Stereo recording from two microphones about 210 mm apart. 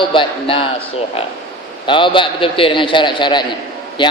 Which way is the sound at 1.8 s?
25° left (ahead or behind).